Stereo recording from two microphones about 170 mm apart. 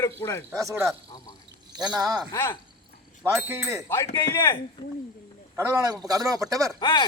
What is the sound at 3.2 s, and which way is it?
Speech, 15° right (ahead or behind).